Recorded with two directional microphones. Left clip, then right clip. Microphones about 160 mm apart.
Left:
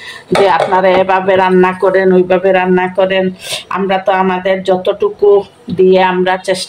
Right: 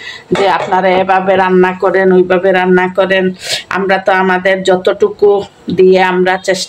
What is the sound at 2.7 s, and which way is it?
Speech, 20° right (ahead or behind).